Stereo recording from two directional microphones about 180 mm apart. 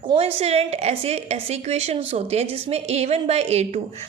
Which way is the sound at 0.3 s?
35° right (ahead or behind).